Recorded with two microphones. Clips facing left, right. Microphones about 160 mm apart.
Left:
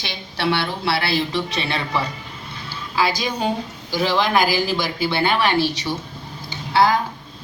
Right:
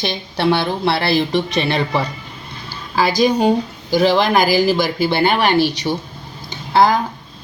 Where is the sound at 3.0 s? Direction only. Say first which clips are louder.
Right 7 dB; 45° right (ahead or behind).